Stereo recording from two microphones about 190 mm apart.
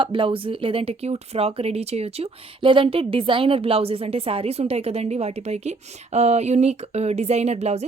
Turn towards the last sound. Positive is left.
turn(degrees=-35)  # may be behind; listen again after turning